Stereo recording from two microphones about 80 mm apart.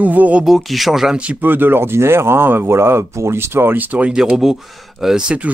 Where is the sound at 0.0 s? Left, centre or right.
Right.